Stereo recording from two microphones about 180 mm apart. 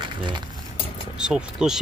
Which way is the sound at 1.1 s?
5° right (ahead or behind).